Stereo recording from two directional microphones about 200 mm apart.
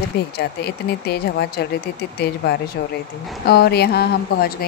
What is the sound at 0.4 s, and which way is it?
A woman's voice, 55° left (ahead or behind).